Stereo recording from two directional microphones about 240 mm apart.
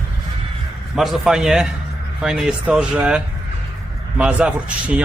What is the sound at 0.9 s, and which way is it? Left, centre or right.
A man's voice, centre.